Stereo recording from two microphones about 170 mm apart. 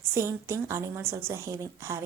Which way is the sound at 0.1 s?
15° right (ahead or behind).